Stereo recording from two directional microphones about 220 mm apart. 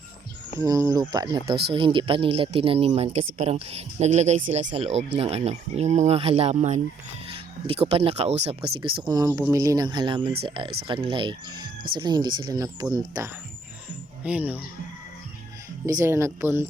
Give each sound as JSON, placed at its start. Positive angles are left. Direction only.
{"t": 0.6, "sound": "speech", "side_deg": -15}
{"t": 15.9, "sound": "speech", "side_deg": -15}